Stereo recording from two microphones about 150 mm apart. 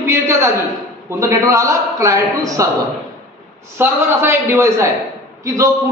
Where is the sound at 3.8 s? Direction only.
15° right (ahead or behind).